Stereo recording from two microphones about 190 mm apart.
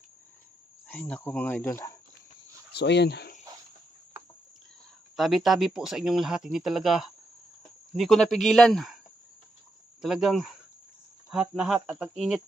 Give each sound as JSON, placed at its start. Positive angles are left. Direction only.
{"t": 0.9, "sound": "speech", "side_deg": 5}
{"t": 2.7, "sound": "speech", "side_deg": 65}
{"t": 4.1, "sound": "cricket", "side_deg": -10}
{"t": 5.1, "sound": "speech", "side_deg": 0}
{"t": 10.0, "sound": "speech", "side_deg": 0}